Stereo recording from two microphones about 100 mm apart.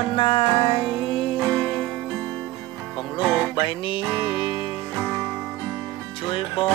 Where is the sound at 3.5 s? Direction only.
50° left (ahead or behind).